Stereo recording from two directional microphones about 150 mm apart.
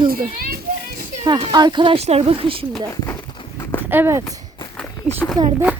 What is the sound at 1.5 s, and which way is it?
Speech, 30° right (ahead or behind).